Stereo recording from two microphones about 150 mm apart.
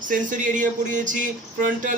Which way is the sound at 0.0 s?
60° right (ahead or behind).